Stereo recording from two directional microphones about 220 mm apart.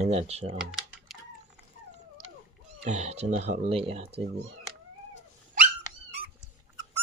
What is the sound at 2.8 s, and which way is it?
Speech, 30° right (ahead or behind).